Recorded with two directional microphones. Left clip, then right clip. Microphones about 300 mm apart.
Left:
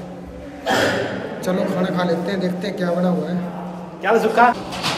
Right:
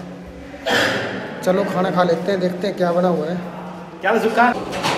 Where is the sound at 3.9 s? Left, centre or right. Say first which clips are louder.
Left 1 dB; centre.